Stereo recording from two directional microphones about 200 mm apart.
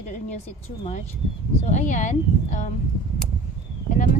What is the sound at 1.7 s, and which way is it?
Speech, 35° left (ahead or behind).